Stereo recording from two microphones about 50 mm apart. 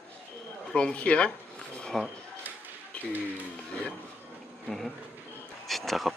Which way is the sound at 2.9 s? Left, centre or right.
Left.